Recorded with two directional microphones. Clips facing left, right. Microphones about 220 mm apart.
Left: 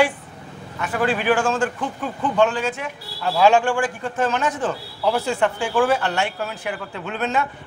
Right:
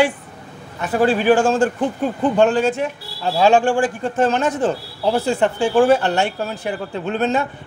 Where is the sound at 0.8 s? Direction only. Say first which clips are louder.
Right 5 dB; 40° right (ahead or behind).